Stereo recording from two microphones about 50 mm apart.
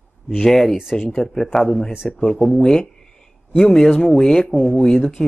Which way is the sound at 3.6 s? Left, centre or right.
Centre.